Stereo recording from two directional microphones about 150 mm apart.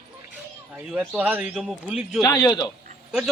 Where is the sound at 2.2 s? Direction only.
25° left (ahead or behind).